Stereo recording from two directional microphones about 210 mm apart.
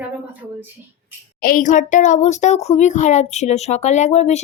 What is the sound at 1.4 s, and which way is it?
A child's voice, 40° left (ahead or behind).